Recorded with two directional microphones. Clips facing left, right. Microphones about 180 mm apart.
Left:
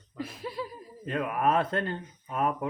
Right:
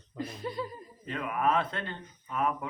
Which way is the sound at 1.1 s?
45° left (ahead or behind).